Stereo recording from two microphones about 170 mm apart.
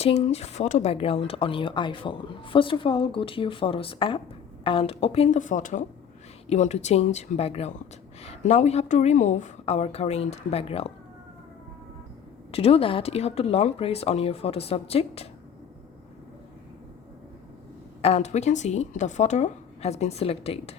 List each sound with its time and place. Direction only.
0.0 s speech: 40° left (ahead or behind)
12.5 s speech: 35° left (ahead or behind)
18.0 s speech: 40° left (ahead or behind)